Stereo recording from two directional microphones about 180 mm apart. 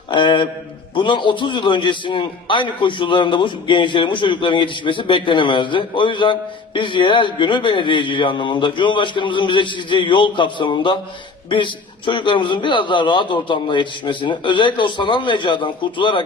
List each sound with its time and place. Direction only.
0.1 s a man's voice: 25° left (ahead or behind)